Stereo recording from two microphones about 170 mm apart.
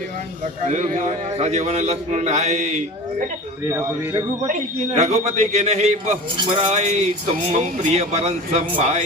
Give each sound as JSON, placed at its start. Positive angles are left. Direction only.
{"t": 0.6, "sound": "a man's voice", "side_deg": -45}
{"t": 3.7, "sound": "speech", "side_deg": -15}
{"t": 4.9, "sound": "a man's voice", "side_deg": -40}